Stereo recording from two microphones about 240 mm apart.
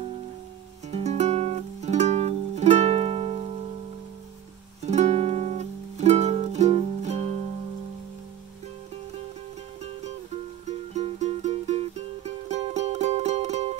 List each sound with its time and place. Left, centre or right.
0.8 s music: right
4.8 s music: right
11.0 s music: right